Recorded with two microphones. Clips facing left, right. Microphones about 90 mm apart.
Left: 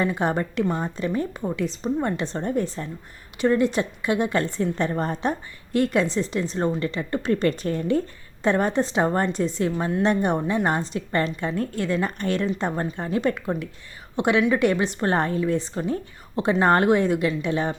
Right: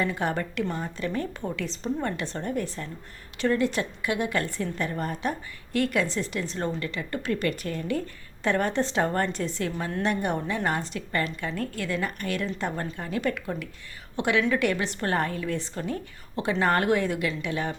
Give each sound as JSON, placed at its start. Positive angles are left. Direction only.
{"t": 0.0, "sound": "a woman's voice", "side_deg": 25}